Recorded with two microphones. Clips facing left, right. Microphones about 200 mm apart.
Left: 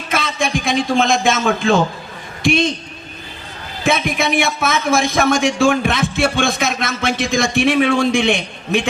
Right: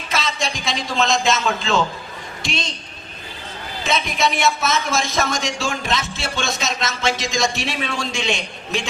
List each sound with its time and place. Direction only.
0.1 s a man's voice: 55° left (ahead or behind)
3.8 s speech: 55° left (ahead or behind)